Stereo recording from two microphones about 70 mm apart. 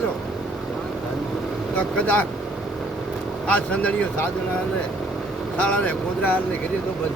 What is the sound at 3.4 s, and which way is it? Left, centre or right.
Speech, centre.